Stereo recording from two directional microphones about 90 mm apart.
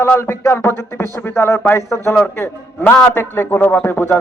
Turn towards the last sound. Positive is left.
turn(degrees=20)  # may be behind; listen again after turning